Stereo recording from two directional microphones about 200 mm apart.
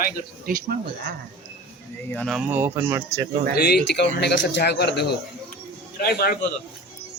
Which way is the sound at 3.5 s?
50° left (ahead or behind).